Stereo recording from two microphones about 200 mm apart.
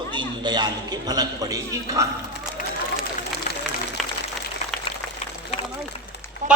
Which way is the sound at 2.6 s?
45° left (ahead or behind).